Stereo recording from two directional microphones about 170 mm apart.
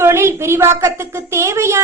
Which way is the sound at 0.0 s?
15° right (ahead or behind).